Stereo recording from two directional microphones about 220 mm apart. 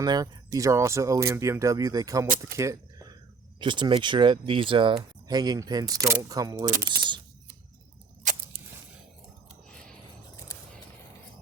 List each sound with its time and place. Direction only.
0.0 s speech: 15° right (ahead or behind)
6.9 s speech: 45° right (ahead or behind)
8.2 s a sound: 35° right (ahead or behind)